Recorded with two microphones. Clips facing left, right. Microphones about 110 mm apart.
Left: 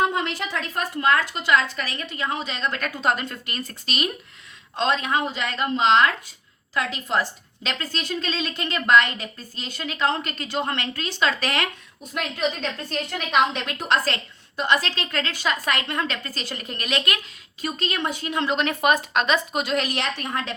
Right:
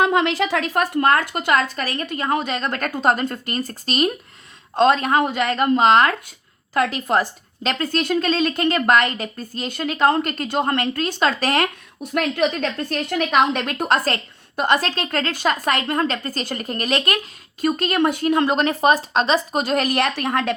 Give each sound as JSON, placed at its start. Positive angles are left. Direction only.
{"t": 0.0, "sound": "a woman's voice", "side_deg": -90}
{"t": 12.1, "sound": "a woman's voice", "side_deg": -55}
{"t": 20.1, "sound": "a woman's voice", "side_deg": -65}